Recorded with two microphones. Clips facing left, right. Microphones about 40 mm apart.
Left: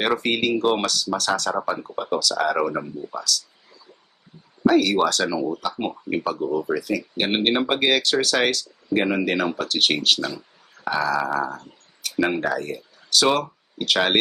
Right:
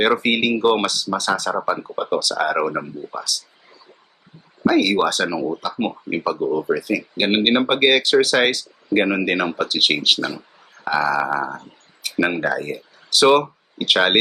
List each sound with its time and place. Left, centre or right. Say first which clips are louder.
0.0 s speech: right 4 dB; centre
4.7 s speech: right 2 dB; right
11.2 s speech: right 2 dB; centre
12.6 s speech: right 3 dB; right